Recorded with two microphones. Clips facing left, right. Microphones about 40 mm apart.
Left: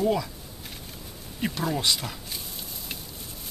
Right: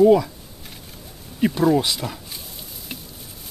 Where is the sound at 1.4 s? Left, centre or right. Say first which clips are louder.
Right 9 dB; centre.